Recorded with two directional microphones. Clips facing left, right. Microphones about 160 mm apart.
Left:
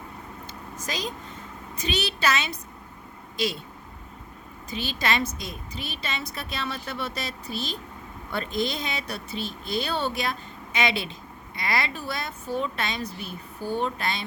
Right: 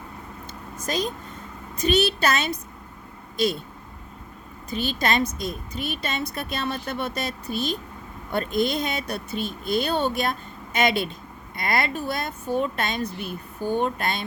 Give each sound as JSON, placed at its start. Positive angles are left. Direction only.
{"t": 0.9, "sound": "speech", "side_deg": -50}
{"t": 4.7, "sound": "speech", "side_deg": -45}